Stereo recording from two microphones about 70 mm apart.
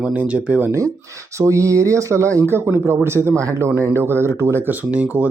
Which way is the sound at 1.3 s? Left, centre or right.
Right.